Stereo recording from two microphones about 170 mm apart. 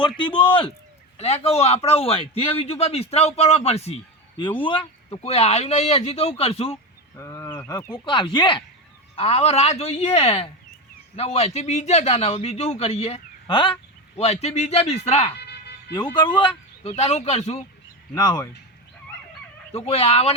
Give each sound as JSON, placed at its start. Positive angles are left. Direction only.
{"t": 0.2, "sound": "a man's voice", "side_deg": 30}
{"t": 7.2, "sound": "a sound", "side_deg": 15}
{"t": 7.7, "sound": "speech", "side_deg": 15}
{"t": 7.9, "sound": "a man's voice", "side_deg": 30}
{"t": 16.1, "sound": "speech", "side_deg": 30}
{"t": 16.9, "sound": "a man's voice", "side_deg": 40}
{"t": 18.1, "sound": "speech", "side_deg": 25}
{"t": 19.7, "sound": "a man's voice", "side_deg": 35}